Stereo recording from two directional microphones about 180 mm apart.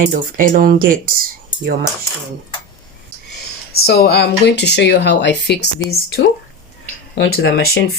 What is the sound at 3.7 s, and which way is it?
Speech, 60° left (ahead or behind).